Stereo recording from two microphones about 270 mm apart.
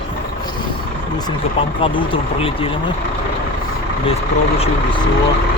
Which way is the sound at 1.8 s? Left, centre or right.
Centre.